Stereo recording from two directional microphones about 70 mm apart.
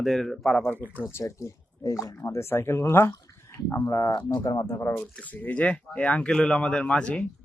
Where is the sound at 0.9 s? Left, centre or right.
Left.